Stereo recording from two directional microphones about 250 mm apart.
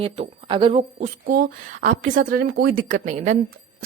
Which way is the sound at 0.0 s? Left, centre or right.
Right.